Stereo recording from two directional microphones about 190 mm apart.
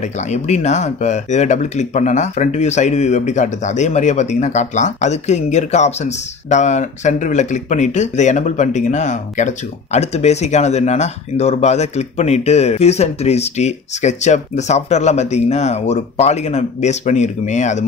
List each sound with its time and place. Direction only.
0.0 s speech: 35° left (ahead or behind)